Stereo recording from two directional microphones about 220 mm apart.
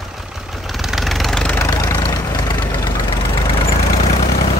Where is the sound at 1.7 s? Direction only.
20° left (ahead or behind).